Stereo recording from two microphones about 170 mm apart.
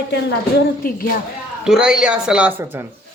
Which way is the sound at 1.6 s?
5° right (ahead or behind).